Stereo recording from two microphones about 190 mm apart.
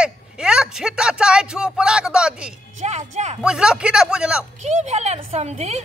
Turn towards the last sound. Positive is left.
turn(degrees=-35)  # may be behind; listen again after turning